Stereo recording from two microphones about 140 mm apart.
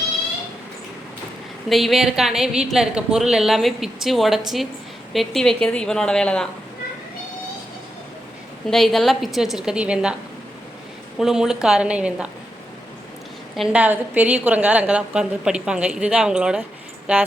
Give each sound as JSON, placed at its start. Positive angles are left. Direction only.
{"t": 1.7, "sound": "a woman's voice", "side_deg": 0}
{"t": 8.7, "sound": "a woman's voice", "side_deg": 0}
{"t": 11.2, "sound": "a woman's voice", "side_deg": -5}
{"t": 13.7, "sound": "a woman's voice", "side_deg": -10}